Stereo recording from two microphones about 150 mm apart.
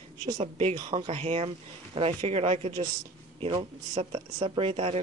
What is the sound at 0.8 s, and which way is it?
Speech, 25° right (ahead or behind).